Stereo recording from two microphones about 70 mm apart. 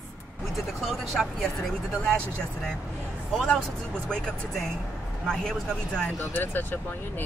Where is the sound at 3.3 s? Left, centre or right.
Centre.